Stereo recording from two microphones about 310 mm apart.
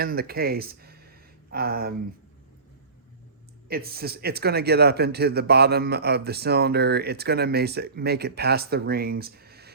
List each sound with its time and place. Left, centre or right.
0.0 s speech: right
3.7 s a man's voice: right